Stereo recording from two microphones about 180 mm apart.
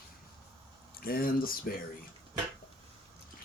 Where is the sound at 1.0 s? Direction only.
55° left (ahead or behind).